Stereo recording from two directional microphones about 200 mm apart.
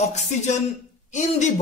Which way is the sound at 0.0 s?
35° left (ahead or behind).